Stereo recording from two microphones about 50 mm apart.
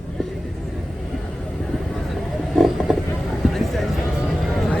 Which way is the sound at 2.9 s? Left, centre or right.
Centre.